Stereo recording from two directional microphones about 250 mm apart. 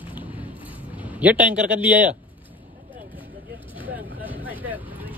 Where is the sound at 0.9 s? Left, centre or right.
Centre.